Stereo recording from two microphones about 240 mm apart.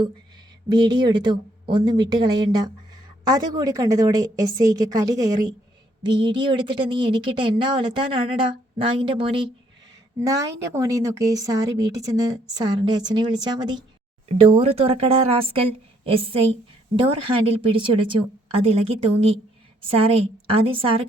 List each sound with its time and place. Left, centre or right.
0.7 s a woman's voice: centre